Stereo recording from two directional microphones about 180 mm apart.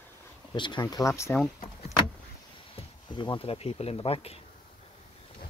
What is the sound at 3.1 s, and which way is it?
Speech, 25° left (ahead or behind).